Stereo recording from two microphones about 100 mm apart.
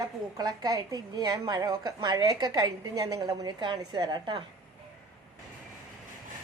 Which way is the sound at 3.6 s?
50° right (ahead or behind).